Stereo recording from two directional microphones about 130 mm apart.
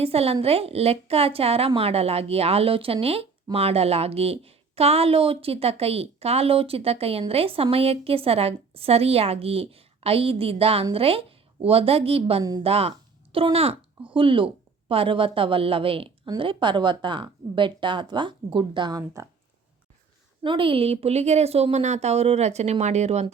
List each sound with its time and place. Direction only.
0.0 s a woman's voice: 50° right (ahead or behind)
12.4 s speech: 30° right (ahead or behind)
12.6 s a woman's voice: 50° right (ahead or behind); by 19.2 s 30° right (ahead or behind)
20.4 s a woman's voice: 40° right (ahead or behind); by 23.2 s 60° right (ahead or behind)